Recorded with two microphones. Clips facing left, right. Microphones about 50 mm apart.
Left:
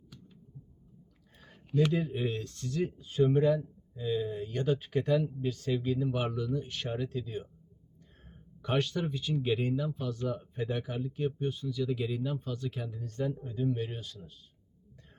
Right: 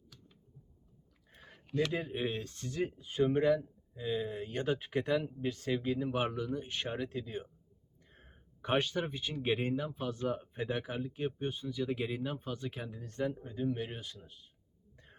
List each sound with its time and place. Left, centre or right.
1.9 s speech: right